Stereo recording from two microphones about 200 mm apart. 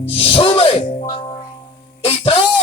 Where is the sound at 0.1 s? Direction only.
30° left (ahead or behind).